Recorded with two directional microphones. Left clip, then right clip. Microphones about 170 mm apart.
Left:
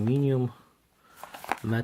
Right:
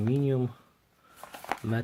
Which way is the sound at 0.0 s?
20° left (ahead or behind).